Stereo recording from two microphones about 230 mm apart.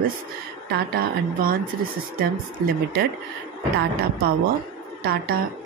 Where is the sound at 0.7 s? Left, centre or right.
Right.